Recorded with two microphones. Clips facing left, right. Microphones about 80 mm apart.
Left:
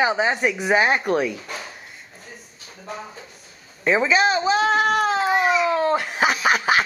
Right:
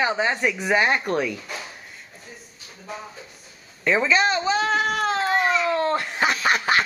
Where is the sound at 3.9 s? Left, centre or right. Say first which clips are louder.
Left 2 dB; centre.